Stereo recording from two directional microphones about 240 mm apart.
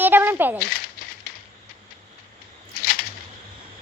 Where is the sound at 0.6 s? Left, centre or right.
Left.